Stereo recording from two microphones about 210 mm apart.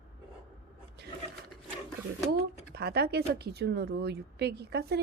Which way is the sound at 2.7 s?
50° right (ahead or behind).